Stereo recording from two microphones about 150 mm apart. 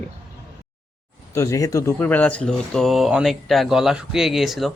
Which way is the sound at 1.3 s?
20° left (ahead or behind).